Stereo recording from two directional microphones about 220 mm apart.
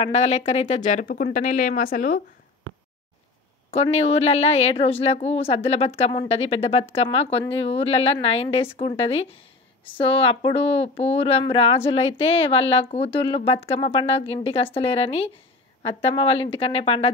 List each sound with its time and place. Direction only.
0.0 s speech: 30° left (ahead or behind)
3.7 s a woman's voice: 25° left (ahead or behind)